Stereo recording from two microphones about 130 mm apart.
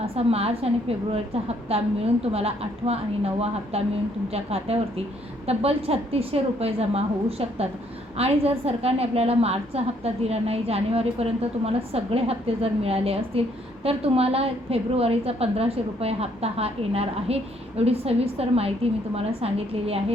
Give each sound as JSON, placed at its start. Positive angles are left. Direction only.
{"t": 0.0, "sound": "a woman's voice", "side_deg": -50}